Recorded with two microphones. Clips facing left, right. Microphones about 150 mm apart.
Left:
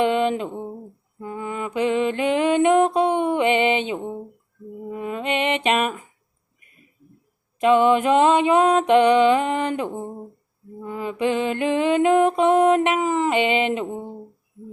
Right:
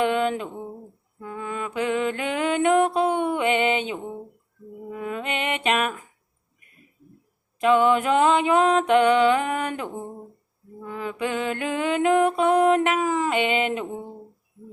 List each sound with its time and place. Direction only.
0.0 s a sound: 20° left (ahead or behind)
1.2 s music: 15° left (ahead or behind)
4.9 s mantra: 15° left (ahead or behind)
7.6 s music: 20° left (ahead or behind)